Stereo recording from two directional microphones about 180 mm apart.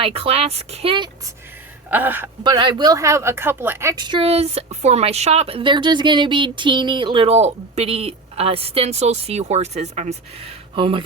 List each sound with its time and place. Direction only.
0.0 s speech: 35° right (ahead or behind)
1.9 s a man's voice: 10° right (ahead or behind)
2.4 s speech: 25° right (ahead or behind)